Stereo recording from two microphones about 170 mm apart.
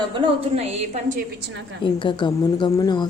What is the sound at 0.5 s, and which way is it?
Speech, 45° right (ahead or behind).